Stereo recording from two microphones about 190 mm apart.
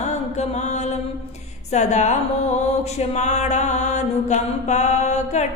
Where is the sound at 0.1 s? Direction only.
35° left (ahead or behind).